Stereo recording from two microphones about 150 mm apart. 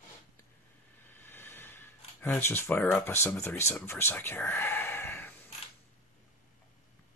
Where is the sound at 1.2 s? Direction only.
15° left (ahead or behind).